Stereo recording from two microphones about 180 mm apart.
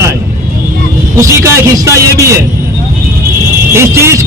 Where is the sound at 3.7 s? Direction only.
15° right (ahead or behind).